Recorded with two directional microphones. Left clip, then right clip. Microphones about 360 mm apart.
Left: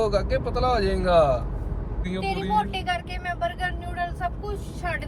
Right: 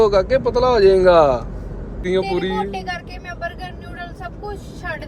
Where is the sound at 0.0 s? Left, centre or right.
Centre.